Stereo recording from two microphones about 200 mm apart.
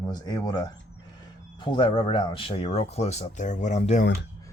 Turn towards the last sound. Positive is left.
turn(degrees=35)  # may be behind; listen again after turning